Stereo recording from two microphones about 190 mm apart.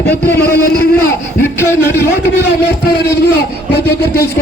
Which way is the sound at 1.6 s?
15° left (ahead or behind).